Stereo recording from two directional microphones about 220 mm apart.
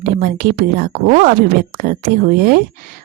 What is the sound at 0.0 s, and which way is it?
A woman's voice, 40° right (ahead or behind).